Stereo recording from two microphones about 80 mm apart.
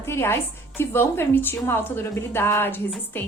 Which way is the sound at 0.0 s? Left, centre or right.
Left.